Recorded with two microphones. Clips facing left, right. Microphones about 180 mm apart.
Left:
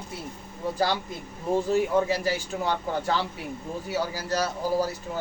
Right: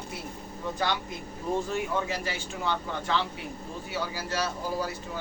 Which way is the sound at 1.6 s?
35° left (ahead or behind).